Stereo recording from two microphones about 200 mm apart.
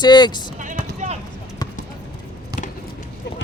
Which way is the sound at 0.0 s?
20° left (ahead or behind).